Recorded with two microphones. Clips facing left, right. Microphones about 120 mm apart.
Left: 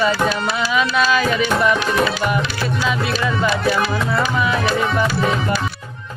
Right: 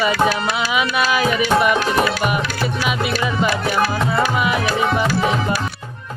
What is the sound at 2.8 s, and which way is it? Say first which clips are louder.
Music: left 1 dB; 15° right (ahead or behind).